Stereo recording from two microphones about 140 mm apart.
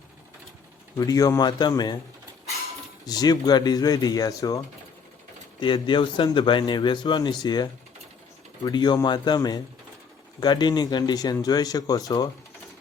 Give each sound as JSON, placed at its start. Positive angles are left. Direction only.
{"t": 0.9, "sound": "speech", "side_deg": 25}
{"t": 3.1, "sound": "speech", "side_deg": 30}
{"t": 5.5, "sound": "a man's voice", "side_deg": 35}